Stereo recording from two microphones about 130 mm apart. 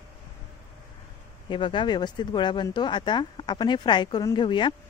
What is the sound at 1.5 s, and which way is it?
Speech, 40° left (ahead or behind).